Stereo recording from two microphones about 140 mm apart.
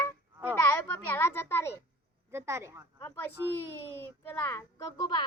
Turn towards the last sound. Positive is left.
turn(degrees=30)  # may be behind; listen again after turning